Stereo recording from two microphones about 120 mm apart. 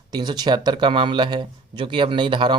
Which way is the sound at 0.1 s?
35° right (ahead or behind).